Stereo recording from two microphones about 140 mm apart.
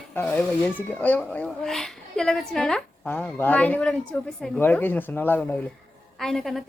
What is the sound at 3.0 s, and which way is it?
Speech, 15° left (ahead or behind).